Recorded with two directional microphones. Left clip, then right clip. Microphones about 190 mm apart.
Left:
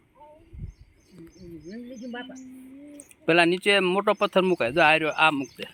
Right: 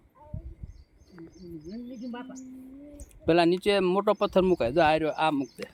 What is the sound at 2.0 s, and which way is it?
Speech, 10° right (ahead or behind).